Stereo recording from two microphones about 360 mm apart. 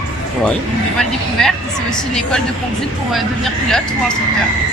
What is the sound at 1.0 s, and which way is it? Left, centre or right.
Speech, centre.